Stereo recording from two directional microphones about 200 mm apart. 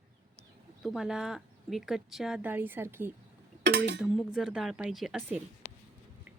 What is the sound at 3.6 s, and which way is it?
Dishes, 55° right (ahead or behind).